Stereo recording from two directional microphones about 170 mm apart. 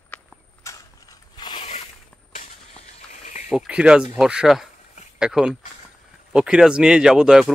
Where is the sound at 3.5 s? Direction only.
5° right (ahead or behind).